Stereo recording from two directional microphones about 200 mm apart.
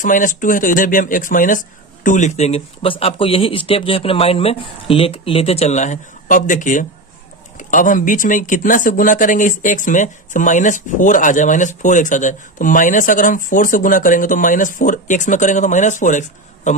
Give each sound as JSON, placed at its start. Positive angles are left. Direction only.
{"t": 0.0, "sound": "speech", "side_deg": 40}